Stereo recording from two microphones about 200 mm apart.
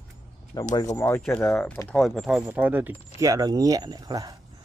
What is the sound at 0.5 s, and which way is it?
Speech, 20° left (ahead or behind).